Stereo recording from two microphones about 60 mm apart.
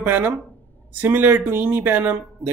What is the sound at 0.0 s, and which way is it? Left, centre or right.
Speech, right.